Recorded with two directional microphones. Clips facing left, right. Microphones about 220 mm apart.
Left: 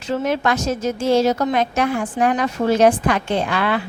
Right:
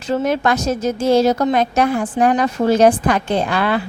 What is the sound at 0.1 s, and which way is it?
A woman's voice, 40° right (ahead or behind).